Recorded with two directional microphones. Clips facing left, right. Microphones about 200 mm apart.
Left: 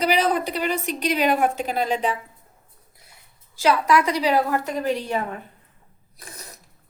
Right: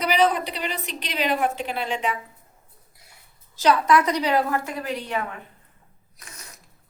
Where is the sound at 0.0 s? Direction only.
40° left (ahead or behind).